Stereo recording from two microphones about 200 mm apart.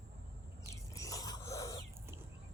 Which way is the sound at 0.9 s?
15° left (ahead or behind).